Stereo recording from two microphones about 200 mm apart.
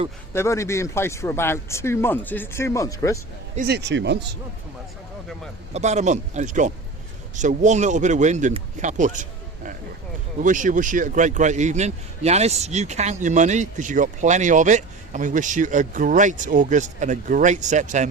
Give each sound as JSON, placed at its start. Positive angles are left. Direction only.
{"t": 0.3, "sound": "speech", "side_deg": 15}
{"t": 3.7, "sound": "speech", "side_deg": -60}
{"t": 5.7, "sound": "speech", "side_deg": -35}
{"t": 10.4, "sound": "speech", "side_deg": -40}